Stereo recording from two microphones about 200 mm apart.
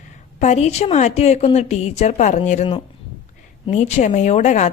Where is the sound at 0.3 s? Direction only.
35° left (ahead or behind).